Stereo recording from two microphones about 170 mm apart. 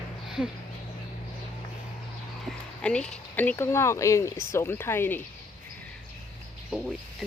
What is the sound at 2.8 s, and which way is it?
Speech, 5° left (ahead or behind).